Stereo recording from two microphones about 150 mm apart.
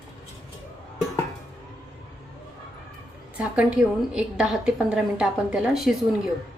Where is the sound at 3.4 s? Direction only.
10° right (ahead or behind).